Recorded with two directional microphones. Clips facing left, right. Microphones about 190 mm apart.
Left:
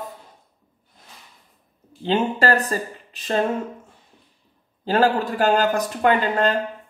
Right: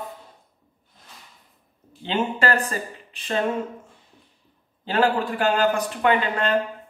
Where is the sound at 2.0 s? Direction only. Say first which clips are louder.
Left 3 dB; 40° left (ahead or behind).